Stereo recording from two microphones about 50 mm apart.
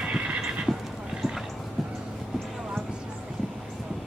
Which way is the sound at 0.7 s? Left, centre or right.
Centre.